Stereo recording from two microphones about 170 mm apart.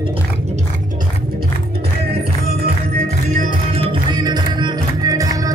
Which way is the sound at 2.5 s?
60° right (ahead or behind).